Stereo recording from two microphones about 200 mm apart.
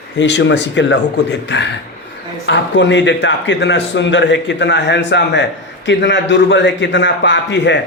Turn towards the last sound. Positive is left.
turn(degrees=60)  # may be behind; listen again after turning